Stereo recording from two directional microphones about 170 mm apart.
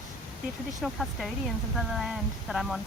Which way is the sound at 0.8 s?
Centre (ahead or behind).